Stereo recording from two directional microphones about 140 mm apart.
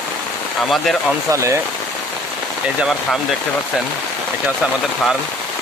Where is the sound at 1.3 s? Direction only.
20° right (ahead or behind).